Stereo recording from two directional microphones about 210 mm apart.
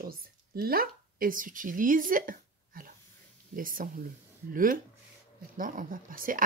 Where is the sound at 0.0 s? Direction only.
45° right (ahead or behind).